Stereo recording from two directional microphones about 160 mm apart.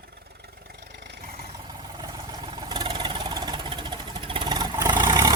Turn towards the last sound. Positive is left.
turn(degrees=-25)  # may be behind; listen again after turning